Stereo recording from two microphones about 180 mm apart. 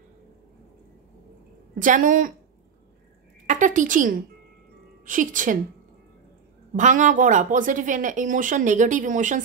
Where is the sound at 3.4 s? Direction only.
45° right (ahead or behind).